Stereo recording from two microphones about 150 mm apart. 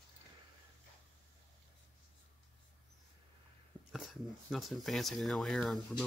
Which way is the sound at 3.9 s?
Centre (ahead or behind).